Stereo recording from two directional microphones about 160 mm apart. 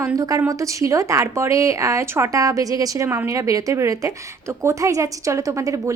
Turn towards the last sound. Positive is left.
turn(degrees=-20)  # may be behind; listen again after turning